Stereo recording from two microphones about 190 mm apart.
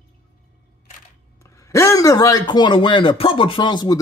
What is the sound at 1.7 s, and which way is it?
A man's voice, 15° left (ahead or behind).